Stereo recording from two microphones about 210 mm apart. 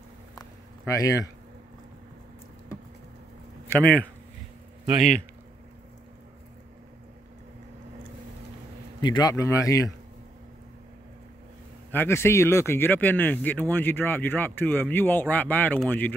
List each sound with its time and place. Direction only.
0.4 s a sound: 15° left (ahead or behind)
3.6 s speech: 5° left (ahead or behind)
9.0 s speech: 20° left (ahead or behind)
11.9 s speech: 10° left (ahead or behind)